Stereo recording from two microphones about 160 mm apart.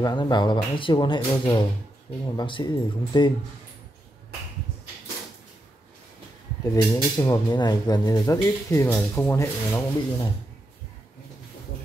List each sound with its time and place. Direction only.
0.0 s speech: 30° left (ahead or behind)
6.6 s speech: 20° left (ahead or behind)